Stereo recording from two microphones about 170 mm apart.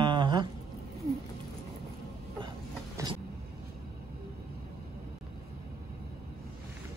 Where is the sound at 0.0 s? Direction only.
30° right (ahead or behind).